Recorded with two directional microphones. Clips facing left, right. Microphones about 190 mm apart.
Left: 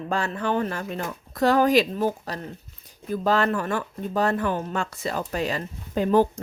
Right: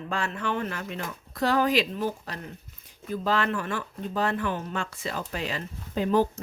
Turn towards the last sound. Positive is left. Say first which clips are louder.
# left 4 dB
turn(degrees=50)  # may be behind; listen again after turning